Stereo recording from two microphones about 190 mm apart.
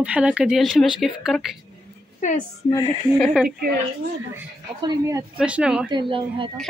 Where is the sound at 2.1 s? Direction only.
40° left (ahead or behind).